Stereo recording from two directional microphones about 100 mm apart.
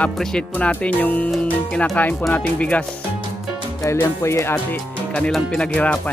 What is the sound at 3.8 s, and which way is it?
Speech, 25° left (ahead or behind).